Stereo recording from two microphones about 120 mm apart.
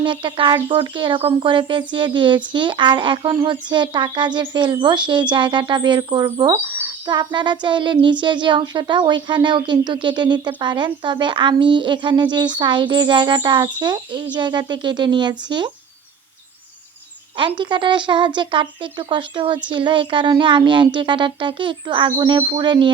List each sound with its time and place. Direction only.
0.0 s speech: 40° right (ahead or behind)
17.3 s speech: 45° right (ahead or behind)